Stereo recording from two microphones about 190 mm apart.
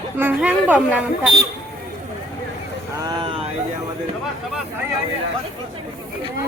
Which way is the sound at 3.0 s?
25° right (ahead or behind).